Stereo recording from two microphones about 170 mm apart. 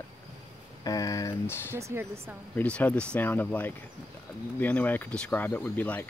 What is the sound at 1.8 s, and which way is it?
Speech, 15° right (ahead or behind).